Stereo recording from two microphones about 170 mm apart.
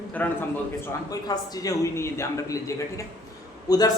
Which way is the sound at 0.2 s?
10° left (ahead or behind).